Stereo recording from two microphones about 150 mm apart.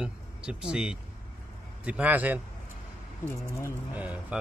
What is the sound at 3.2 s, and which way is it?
Speech, 20° left (ahead or behind).